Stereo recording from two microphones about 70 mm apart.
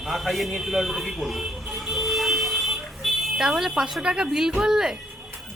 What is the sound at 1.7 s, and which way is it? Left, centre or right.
Car alarm, centre.